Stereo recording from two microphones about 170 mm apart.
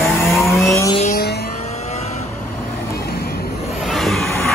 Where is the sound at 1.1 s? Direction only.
70° left (ahead or behind).